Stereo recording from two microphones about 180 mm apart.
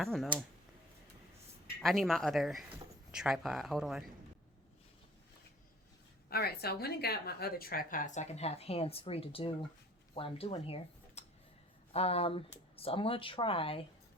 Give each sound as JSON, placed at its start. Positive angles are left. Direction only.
{"t": 0.0, "sound": "speech", "side_deg": 0}
{"t": 1.8, "sound": "speech", "side_deg": 0}
{"t": 6.3, "sound": "speech", "side_deg": 60}